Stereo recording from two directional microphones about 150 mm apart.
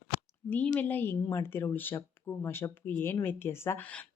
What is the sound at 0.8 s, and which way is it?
Speech, 15° left (ahead or behind).